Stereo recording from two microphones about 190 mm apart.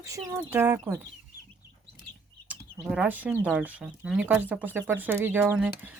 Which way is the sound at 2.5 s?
5° right (ahead or behind).